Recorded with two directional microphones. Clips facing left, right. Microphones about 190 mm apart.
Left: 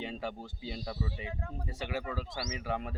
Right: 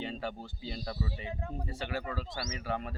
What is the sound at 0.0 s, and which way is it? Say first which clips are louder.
Speech: right 1 dB; 15° left (ahead or behind).